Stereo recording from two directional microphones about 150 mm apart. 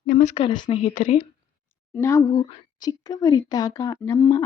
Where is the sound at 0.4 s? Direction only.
30° left (ahead or behind).